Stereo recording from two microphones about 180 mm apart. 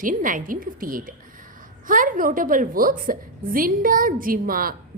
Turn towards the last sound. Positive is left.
turn(degrees=-50)  # may be behind; listen again after turning